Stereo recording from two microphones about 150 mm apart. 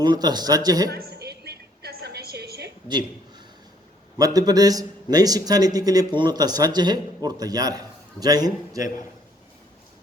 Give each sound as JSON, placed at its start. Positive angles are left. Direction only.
{"t": 0.0, "sound": "a man's voice", "side_deg": -30}
{"t": 0.9, "sound": "a sound", "side_deg": -90}
{"t": 4.2, "sound": "a man's voice", "side_deg": -25}